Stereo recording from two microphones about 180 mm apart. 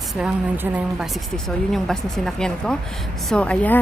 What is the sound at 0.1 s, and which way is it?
A woman's voice, 5° right (ahead or behind).